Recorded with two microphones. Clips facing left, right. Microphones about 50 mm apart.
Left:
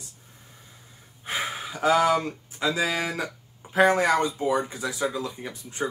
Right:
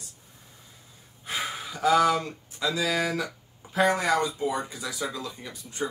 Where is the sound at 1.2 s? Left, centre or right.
Left.